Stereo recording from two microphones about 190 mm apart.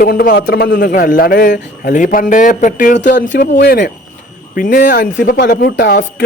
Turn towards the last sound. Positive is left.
turn(degrees=60)  # may be behind; listen again after turning